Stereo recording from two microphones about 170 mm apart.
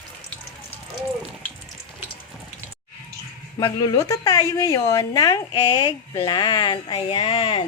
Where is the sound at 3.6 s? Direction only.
20° left (ahead or behind).